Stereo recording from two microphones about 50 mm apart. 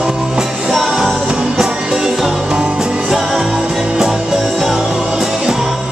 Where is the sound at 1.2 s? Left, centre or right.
Centre.